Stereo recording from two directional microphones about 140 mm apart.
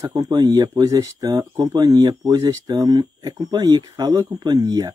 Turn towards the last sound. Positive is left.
turn(degrees=-30)  # may be behind; listen again after turning